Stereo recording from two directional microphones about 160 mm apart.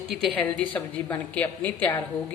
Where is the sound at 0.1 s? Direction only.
Centre (ahead or behind).